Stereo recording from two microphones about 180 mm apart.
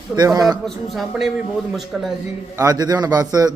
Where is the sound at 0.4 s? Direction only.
Centre (ahead or behind).